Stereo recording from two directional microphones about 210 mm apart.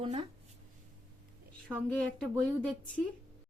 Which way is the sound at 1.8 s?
5° left (ahead or behind).